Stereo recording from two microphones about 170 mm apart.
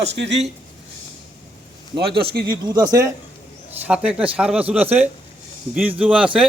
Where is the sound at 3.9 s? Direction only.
5° right (ahead or behind).